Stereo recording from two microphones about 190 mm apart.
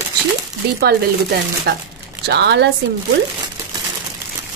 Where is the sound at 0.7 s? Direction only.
55° right (ahead or behind).